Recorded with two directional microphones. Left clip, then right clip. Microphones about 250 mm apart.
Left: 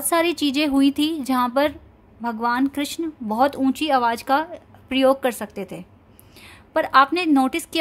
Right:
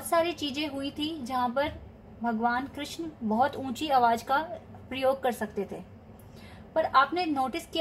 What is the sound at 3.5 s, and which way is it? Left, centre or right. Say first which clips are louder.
Speech: left 6 dB; left.